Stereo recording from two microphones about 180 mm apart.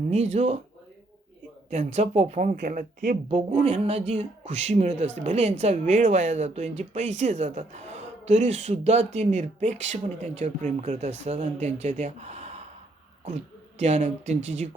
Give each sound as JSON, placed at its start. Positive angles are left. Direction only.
{"t": 0.1, "sound": "speech", "side_deg": -40}
{"t": 1.7, "sound": "speech", "side_deg": -40}
{"t": 2.6, "sound": "speech", "side_deg": -55}
{"t": 3.2, "sound": "speech", "side_deg": -35}